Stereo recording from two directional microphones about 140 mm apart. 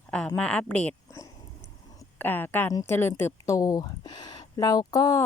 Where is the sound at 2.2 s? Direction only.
15° left (ahead or behind).